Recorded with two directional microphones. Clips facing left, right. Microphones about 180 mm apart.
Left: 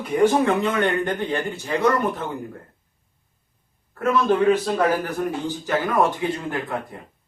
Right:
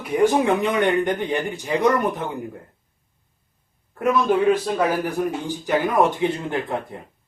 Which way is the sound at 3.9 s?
15° right (ahead or behind).